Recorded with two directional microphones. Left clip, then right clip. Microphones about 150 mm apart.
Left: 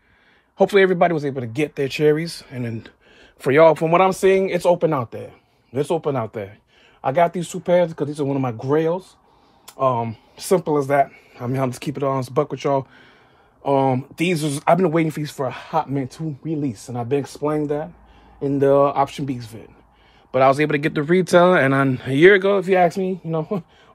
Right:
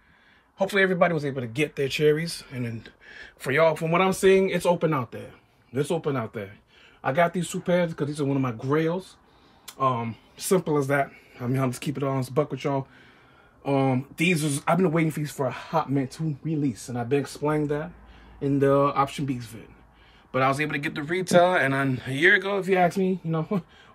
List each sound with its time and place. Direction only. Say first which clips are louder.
0.6 s speech: left 6 dB; 45° left (ahead or behind)
3.3 s speech: left 8 dB; 35° left (ahead or behind)
15.1 s speech: left 3 dB; 30° left (ahead or behind)
16.6 s speech: left 3 dB; 55° left (ahead or behind)
17.4 s speech: left 4 dB; 30° left (ahead or behind)
18.4 s speech: left 5 dB; 55° left (ahead or behind)